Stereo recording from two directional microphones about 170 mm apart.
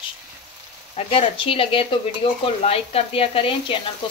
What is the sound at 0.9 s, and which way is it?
Sizzle, 30° left (ahead or behind).